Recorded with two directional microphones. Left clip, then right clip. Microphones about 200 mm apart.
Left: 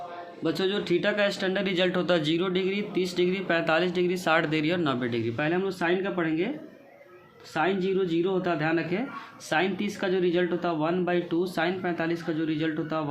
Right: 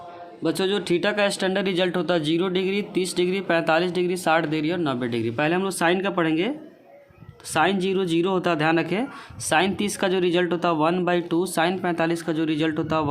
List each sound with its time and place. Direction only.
0.4 s speech: 35° right (ahead or behind)
7.5 s speech: 40° right (ahead or behind)